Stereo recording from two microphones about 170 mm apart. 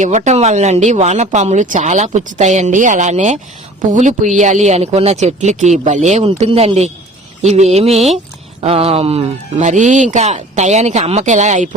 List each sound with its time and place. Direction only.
0.0 s speech: 45° right (ahead or behind)